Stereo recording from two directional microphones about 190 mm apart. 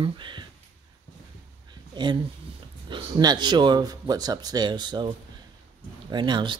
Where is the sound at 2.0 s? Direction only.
25° right (ahead or behind).